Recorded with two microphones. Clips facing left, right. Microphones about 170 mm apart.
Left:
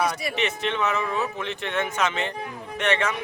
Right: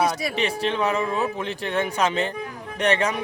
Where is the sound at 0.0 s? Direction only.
35° right (ahead or behind).